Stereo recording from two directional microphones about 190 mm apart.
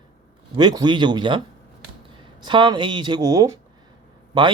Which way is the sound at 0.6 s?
25° right (ahead or behind).